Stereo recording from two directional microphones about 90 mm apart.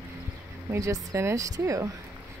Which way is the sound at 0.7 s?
30° right (ahead or behind).